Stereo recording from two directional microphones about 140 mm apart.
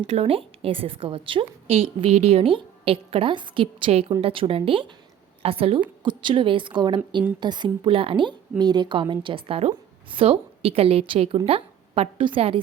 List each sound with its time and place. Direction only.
0.1 s a woman's voice: 45° right (ahead or behind)